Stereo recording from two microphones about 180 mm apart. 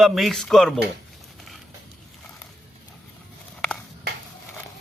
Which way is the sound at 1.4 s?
Centre (ahead or behind).